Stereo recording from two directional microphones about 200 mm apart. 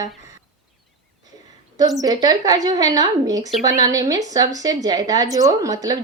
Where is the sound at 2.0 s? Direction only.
20° right (ahead or behind).